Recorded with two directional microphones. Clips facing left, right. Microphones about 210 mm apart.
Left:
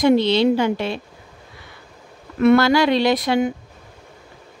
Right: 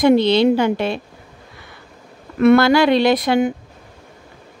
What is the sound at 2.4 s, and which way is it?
Speech, 60° right (ahead or behind).